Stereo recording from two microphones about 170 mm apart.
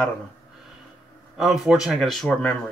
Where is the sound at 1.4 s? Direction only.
Centre (ahead or behind).